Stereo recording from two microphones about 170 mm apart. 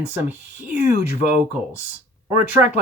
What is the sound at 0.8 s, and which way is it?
Speech, 50° left (ahead or behind).